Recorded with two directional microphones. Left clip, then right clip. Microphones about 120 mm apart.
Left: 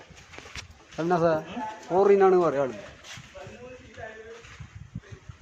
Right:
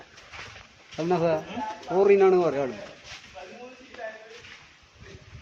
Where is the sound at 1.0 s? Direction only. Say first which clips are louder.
Left 1 dB; 10° left (ahead or behind).